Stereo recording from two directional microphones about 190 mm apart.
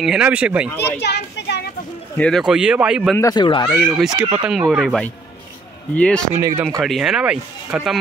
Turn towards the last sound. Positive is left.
turn(degrees=-5)  # may be behind; listen again after turning